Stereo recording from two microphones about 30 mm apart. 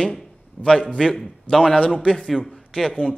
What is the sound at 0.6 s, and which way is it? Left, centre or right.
Speech, left.